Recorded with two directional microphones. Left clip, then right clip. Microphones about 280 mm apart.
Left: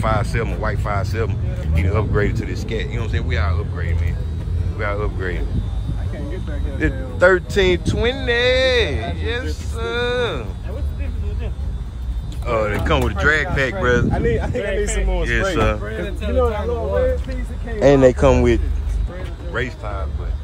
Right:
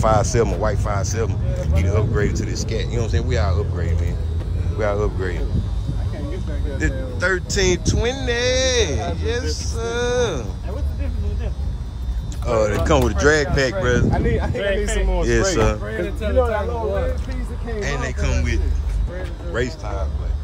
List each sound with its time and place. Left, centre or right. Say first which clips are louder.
0.0 s speech: right 4 dB; centre
6.8 s speech: left 8 dB; centre
12.4 s speech: right 1 dB; centre
14.1 s speech: left 2 dB; left
15.2 s speech: even; centre
15.8 s speech: right 2 dB; centre
17.7 s speech: left 14 dB; centre
19.5 s speech: even; centre